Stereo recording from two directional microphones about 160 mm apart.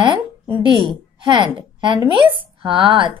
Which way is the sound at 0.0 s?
30° right (ahead or behind).